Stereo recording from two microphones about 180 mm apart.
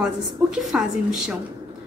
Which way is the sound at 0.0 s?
5° right (ahead or behind).